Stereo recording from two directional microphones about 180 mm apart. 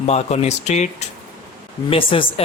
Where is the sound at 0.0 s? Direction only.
35° left (ahead or behind).